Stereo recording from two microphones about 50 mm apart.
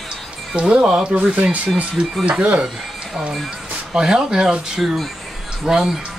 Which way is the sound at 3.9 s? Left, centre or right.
Centre.